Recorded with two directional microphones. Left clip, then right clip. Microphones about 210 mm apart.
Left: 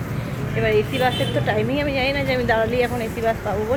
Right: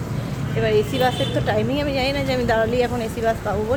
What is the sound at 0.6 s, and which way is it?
Speech, 10° right (ahead or behind).